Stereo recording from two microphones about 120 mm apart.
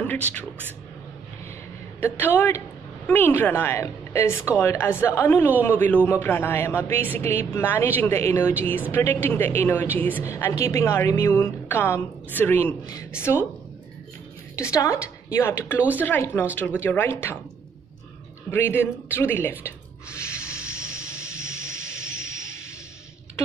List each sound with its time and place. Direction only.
2.0 s a man's voice: 20° left (ahead or behind)
14.5 s a woman's voice: 25° left (ahead or behind)
18.5 s a man's voice: 20° left (ahead or behind)
20.2 s a sound: 25° left (ahead or behind)
21.1 s vehicle: 25° left (ahead or behind)